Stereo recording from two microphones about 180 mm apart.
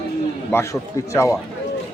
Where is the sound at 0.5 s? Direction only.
15° left (ahead or behind).